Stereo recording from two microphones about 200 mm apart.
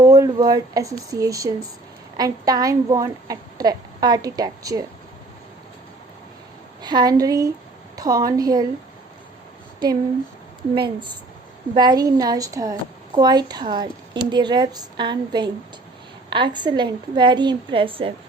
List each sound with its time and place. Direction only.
0.0 s a woman's voice: 15° right (ahead or behind)
6.8 s a woman's voice: 20° right (ahead or behind)
10.8 s a woman's voice: 25° right (ahead or behind)